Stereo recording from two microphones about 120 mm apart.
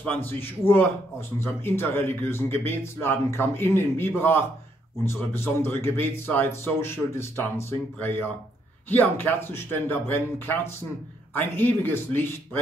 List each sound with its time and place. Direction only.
0.0 s a man's voice: 15° left (ahead or behind)